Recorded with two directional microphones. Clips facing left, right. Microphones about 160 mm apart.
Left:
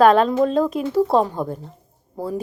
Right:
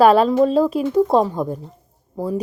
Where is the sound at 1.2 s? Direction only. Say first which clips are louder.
Right 2 dB; 5° left (ahead or behind).